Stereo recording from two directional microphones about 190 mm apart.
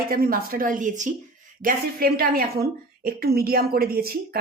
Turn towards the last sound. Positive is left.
turn(degrees=-55)  # may be behind; listen again after turning